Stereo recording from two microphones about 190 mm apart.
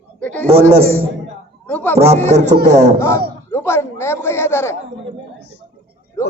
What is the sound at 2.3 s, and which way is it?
Speech, 40° right (ahead or behind).